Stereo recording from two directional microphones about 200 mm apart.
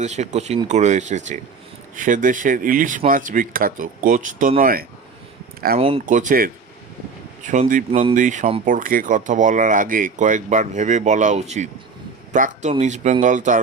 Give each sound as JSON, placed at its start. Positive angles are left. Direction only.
{"t": 0.0, "sound": "a man's voice", "side_deg": -35}